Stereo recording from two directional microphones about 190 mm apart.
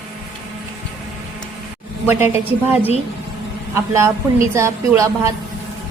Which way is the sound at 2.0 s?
10° right (ahead or behind).